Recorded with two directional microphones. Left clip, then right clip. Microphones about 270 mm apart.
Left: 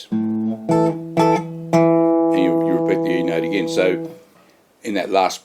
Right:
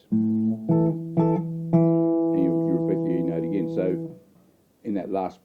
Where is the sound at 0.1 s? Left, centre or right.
Centre.